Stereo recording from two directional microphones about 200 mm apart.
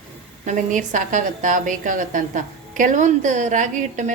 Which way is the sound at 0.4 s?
40° right (ahead or behind).